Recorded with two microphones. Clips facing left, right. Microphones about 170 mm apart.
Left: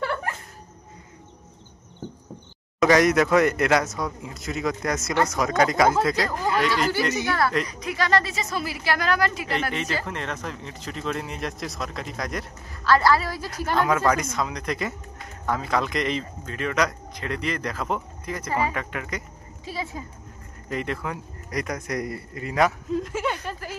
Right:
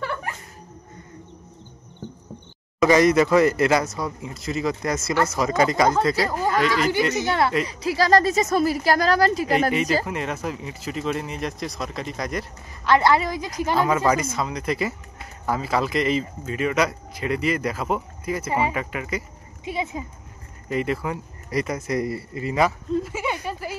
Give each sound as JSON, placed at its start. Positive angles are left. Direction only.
{"t": 2.8, "sound": "speech", "side_deg": 0}
{"t": 7.2, "sound": "a woman's voice", "side_deg": -25}
{"t": 10.0, "sound": "speech", "side_deg": -10}
{"t": 12.8, "sound": "speech", "side_deg": -20}
{"t": 19.6, "sound": "speech", "side_deg": -20}
{"t": 20.7, "sound": "speech", "side_deg": -5}